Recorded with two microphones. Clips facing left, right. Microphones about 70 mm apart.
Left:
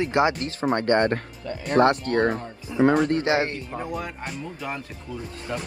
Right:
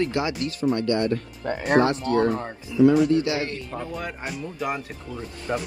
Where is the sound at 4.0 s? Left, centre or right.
Centre.